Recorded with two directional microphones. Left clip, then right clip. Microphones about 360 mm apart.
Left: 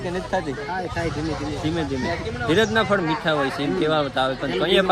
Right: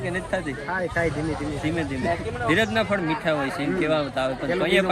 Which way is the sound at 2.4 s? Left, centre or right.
Centre.